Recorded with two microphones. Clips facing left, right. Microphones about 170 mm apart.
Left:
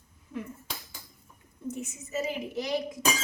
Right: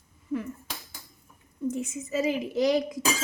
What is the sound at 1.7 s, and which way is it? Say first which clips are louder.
A woman's voice: right 6 dB; 90° right.